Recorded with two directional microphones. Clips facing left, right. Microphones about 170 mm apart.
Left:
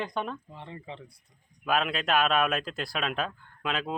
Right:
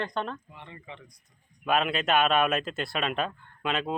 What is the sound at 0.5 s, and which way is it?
Speech, 30° left (ahead or behind).